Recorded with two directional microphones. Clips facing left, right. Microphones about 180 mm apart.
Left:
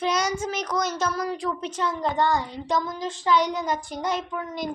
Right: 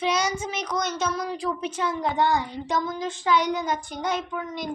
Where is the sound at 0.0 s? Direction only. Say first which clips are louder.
Even; centre (ahead or behind).